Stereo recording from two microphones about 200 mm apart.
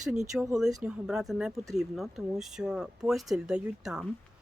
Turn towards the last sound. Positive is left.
turn(degrees=-5)  # may be behind; listen again after turning